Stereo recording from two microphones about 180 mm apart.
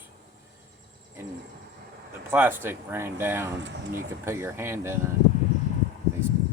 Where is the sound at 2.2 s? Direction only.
15° right (ahead or behind).